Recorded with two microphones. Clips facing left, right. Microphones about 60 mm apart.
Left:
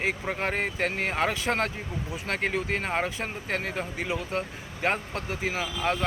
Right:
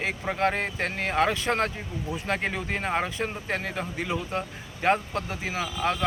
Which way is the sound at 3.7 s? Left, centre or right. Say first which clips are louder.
Right 1 dB; centre.